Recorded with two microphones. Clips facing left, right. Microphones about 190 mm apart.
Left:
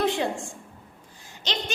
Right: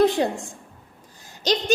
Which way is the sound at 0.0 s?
40° right (ahead or behind).